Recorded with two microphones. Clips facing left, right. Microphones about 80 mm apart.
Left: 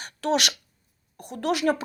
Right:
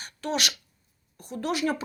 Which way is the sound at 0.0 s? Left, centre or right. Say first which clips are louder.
Left 5 dB; left.